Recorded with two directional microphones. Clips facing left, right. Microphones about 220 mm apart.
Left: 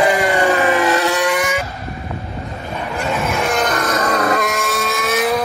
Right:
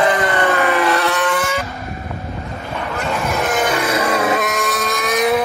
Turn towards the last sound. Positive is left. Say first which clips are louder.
# right 1 dB
turn(degrees=5)  # may be behind; listen again after turning